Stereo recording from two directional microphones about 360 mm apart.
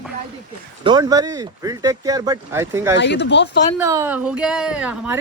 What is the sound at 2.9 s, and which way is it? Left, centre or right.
Speech, left.